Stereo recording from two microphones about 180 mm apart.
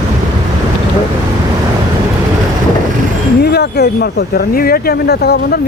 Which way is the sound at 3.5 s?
65° left (ahead or behind).